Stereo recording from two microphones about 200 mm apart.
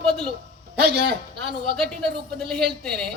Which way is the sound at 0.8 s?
55° right (ahead or behind).